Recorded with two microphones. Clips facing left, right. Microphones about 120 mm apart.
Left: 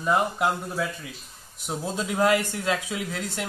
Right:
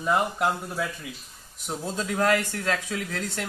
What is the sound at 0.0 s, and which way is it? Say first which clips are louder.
Speech: left 1 dB; 5° left (ahead or behind).